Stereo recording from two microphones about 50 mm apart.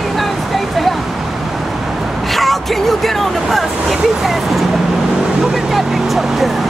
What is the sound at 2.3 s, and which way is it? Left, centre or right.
Vehicle, centre.